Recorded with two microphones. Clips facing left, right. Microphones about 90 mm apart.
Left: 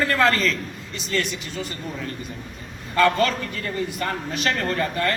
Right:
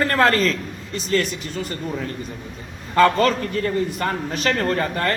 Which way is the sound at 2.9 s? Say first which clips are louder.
Right 3 dB; 40° right (ahead or behind).